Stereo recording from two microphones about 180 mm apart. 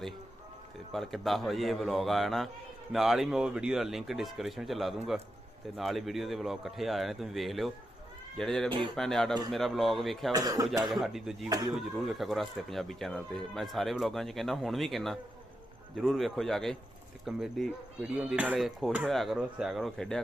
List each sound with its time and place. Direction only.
0.9 s speech: centre (ahead or behind)
10.3 s speech: 20° right (ahead or behind)
10.8 s speech: centre (ahead or behind)
11.4 s speech: 20° right (ahead or behind)
11.7 s speech: centre (ahead or behind)